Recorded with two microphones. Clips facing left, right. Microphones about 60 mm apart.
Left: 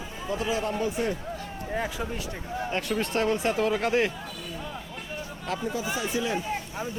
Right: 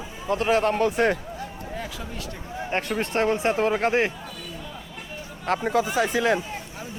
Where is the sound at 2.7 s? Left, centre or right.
Right.